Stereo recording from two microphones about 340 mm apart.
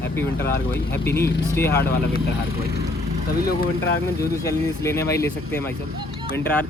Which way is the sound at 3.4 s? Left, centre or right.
Left.